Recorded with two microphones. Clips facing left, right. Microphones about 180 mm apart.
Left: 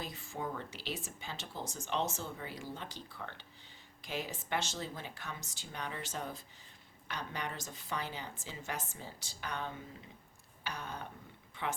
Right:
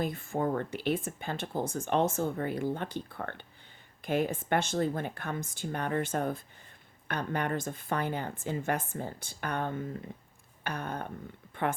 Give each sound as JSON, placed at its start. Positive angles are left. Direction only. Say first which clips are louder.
{"t": 0.0, "sound": "speech", "louder": "right 10 dB", "side_deg": -55}